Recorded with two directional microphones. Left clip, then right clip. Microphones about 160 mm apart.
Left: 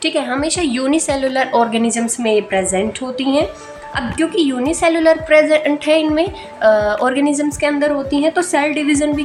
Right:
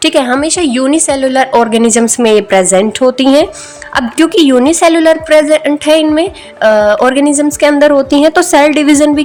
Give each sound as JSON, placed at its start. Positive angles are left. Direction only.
{"t": 0.0, "sound": "a woman's voice", "side_deg": -55}
{"t": 0.3, "sound": "a woman's voice", "side_deg": -35}